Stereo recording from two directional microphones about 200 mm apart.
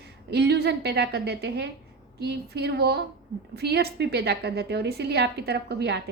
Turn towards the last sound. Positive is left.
turn(degrees=-55)  # may be behind; listen again after turning